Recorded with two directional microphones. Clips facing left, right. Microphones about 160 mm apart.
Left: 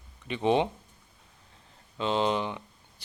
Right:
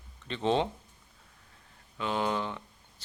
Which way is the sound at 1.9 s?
25° left (ahead or behind).